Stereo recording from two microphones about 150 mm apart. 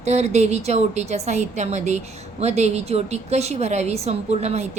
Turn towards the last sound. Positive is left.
turn(degrees=-45)  # may be behind; listen again after turning